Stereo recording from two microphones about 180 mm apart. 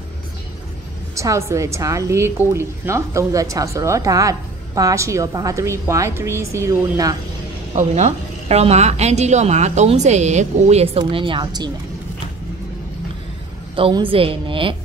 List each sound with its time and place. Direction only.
1.1 s a woman's voice: 15° right (ahead or behind)
7.7 s a woman's voice: 40° right (ahead or behind)
13.7 s a woman's voice: 30° right (ahead or behind)